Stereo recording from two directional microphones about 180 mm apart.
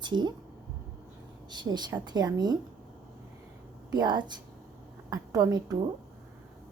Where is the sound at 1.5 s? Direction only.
25° right (ahead or behind).